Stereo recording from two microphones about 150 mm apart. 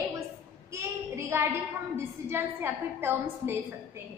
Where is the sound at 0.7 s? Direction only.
20° right (ahead or behind).